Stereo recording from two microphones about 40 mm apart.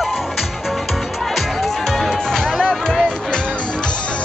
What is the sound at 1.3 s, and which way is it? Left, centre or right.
Music, centre.